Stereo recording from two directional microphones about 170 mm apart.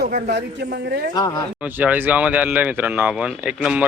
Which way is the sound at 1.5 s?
10° right (ahead or behind).